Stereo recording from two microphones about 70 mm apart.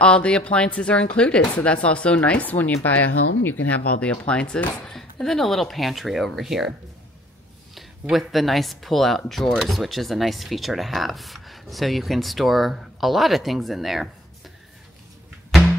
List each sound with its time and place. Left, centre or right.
0.0 s speech: centre
4.9 s speech: centre
7.7 s speech: centre